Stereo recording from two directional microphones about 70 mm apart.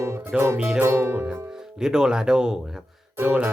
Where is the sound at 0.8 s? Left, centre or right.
Right.